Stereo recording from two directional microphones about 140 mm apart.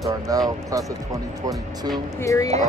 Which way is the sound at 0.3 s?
25° right (ahead or behind).